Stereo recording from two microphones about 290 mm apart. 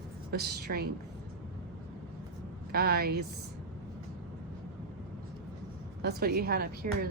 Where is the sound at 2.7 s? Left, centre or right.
Right.